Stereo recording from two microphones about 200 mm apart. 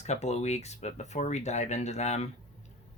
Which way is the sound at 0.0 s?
35° left (ahead or behind).